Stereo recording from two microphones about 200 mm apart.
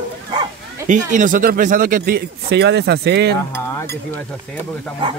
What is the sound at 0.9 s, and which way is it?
Speech, 40° right (ahead or behind).